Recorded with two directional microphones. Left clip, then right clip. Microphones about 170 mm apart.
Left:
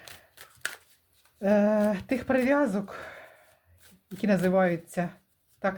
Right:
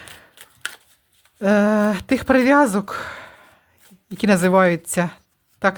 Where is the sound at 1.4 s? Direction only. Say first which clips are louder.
Right 6 dB; 40° right (ahead or behind).